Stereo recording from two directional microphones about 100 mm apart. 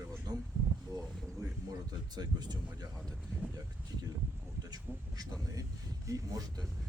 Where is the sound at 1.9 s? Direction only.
40° right (ahead or behind).